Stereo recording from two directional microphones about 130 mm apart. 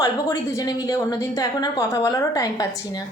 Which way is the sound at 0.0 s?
25° left (ahead or behind).